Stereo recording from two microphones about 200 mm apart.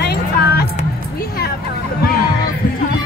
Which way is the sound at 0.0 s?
50° left (ahead or behind).